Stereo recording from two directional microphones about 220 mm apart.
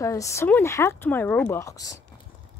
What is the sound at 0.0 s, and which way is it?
Speech, 15° left (ahead or behind).